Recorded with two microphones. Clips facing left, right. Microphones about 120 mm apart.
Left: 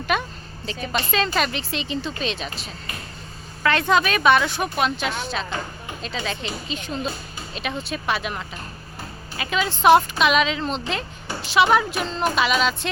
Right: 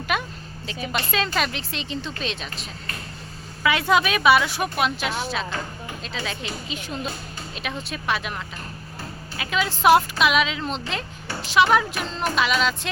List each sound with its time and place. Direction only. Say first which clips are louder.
0.1 s a sound: left 2 dB; 5° right (ahead or behind)
1.3 s speech: left 2 dB; centre (ahead or behind)
9.4 s speech: left 1 dB; centre (ahead or behind)